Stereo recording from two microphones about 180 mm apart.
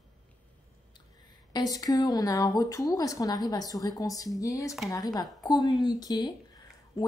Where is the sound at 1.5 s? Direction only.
20° left (ahead or behind).